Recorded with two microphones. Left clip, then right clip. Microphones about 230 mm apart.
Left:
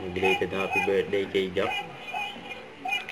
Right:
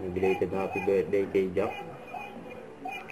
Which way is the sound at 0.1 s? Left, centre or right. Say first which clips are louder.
Left 3 dB; left.